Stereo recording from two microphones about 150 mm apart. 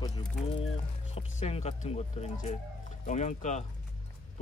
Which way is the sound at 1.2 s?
45° left (ahead or behind).